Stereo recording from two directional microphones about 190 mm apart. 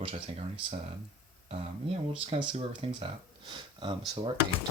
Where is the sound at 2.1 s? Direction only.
30° right (ahead or behind).